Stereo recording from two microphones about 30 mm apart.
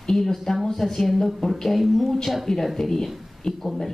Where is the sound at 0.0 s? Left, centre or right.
Centre.